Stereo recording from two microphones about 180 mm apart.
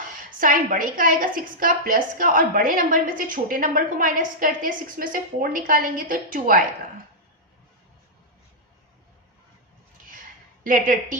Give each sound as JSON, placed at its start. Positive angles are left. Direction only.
{"t": 0.3, "sound": "a woman's voice", "side_deg": -50}
{"t": 10.6, "sound": "a woman's voice", "side_deg": -45}